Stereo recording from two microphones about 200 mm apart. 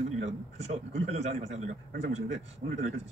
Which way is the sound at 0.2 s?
35° right (ahead or behind).